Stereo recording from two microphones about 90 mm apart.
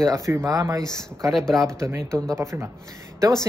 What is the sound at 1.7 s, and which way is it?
Speech, 35° right (ahead or behind).